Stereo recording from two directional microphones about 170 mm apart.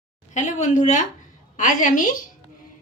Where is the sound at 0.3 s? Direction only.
45° left (ahead or behind).